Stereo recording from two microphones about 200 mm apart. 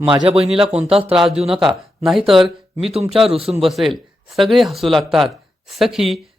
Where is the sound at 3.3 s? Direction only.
30° right (ahead or behind).